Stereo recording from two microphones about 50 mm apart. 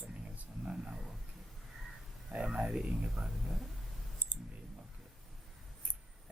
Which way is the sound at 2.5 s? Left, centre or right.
Centre.